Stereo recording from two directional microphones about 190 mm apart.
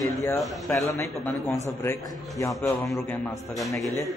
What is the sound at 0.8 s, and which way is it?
A man's voice, 15° left (ahead or behind).